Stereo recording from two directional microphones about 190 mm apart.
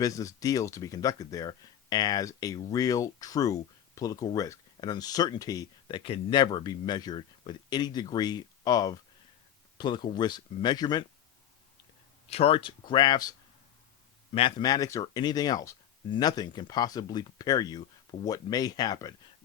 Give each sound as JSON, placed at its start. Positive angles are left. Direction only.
{"t": 0.0, "sound": "speech", "side_deg": 15}
{"t": 12.3, "sound": "speech", "side_deg": 30}
{"t": 14.3, "sound": "speech", "side_deg": 25}